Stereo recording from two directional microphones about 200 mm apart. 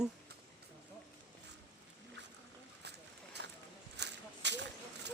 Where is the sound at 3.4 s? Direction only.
60° right (ahead or behind).